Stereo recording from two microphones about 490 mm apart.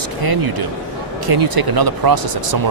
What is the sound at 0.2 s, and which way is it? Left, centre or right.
Speech, right.